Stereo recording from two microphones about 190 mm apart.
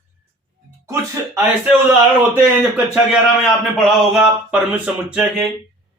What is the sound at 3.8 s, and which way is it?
Speech, centre (ahead or behind).